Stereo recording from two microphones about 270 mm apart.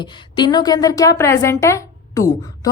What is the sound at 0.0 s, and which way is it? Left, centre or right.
A woman's voice, centre.